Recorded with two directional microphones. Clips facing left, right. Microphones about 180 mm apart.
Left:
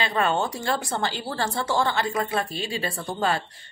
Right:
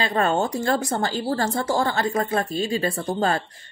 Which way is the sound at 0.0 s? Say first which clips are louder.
Right 2 dB; 45° right (ahead or behind).